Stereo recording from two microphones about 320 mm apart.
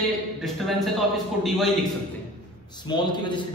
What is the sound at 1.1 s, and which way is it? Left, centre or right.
Speech, centre.